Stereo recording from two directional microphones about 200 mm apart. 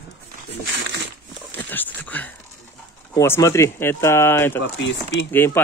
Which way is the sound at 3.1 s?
15° left (ahead or behind).